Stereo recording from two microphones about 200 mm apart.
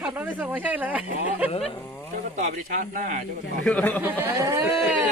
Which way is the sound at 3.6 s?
5° left (ahead or behind).